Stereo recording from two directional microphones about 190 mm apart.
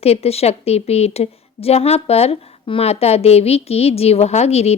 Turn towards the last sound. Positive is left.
turn(degrees=35)  # may be behind; listen again after turning